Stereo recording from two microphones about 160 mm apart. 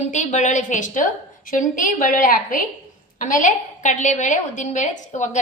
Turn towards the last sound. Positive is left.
turn(degrees=50)  # may be behind; listen again after turning